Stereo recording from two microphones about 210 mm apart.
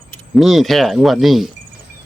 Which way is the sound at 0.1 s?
Centre (ahead or behind).